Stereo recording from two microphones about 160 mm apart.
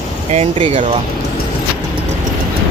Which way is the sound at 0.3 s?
35° right (ahead or behind).